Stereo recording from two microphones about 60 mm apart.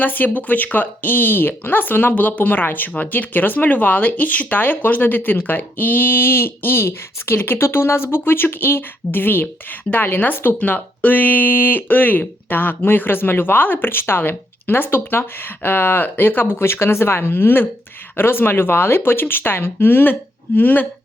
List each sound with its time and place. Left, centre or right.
0.0 s speech: left